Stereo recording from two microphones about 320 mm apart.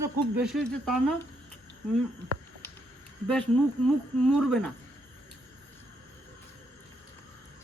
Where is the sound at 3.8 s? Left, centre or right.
Centre.